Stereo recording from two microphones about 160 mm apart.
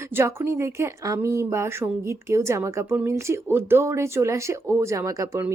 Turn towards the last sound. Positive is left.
turn(degrees=-20)  # may be behind; listen again after turning